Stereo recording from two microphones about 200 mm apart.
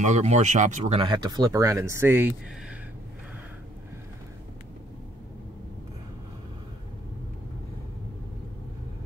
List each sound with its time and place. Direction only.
0.0 s speech: 35° right (ahead or behind); by 2.3 s 10° right (ahead or behind)